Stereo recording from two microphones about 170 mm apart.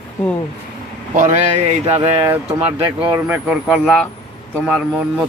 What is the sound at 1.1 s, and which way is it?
Speech, 45° right (ahead or behind).